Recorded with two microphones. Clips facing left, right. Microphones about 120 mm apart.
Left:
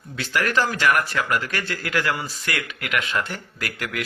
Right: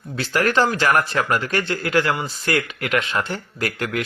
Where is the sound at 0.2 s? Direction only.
30° right (ahead or behind).